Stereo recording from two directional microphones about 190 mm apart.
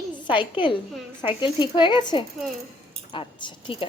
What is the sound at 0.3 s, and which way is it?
A woman's voice, 25° left (ahead or behind).